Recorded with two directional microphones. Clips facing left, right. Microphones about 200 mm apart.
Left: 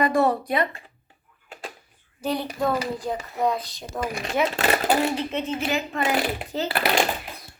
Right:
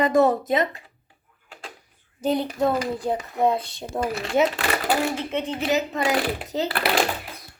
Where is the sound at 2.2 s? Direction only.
20° right (ahead or behind).